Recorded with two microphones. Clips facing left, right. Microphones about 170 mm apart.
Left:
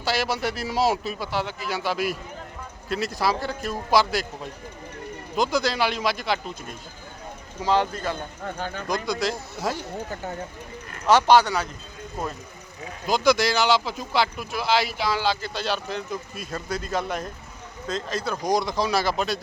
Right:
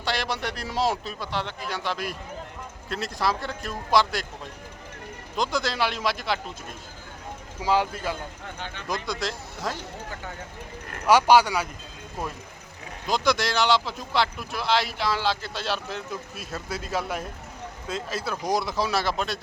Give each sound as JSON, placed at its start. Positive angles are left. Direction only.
{"t": 0.0, "sound": "speech", "side_deg": 5}
{"t": 5.4, "sound": "speech", "side_deg": 0}
{"t": 7.6, "sound": "speech", "side_deg": -10}
{"t": 8.5, "sound": "speech", "side_deg": 45}
{"t": 9.0, "sound": "speech", "side_deg": 0}
{"t": 11.0, "sound": "speech", "side_deg": -10}
{"t": 13.1, "sound": "speech", "side_deg": 0}